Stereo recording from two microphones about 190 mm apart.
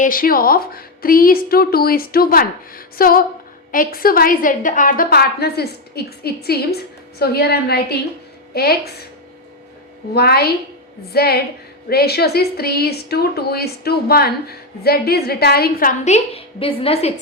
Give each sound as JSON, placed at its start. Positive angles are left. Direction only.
{"t": 0.0, "sound": "a woman's voice", "side_deg": 50}
{"t": 10.2, "sound": "a woman's voice", "side_deg": 55}